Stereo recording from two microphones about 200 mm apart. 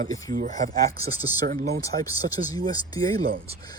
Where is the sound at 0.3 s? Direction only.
45° right (ahead or behind).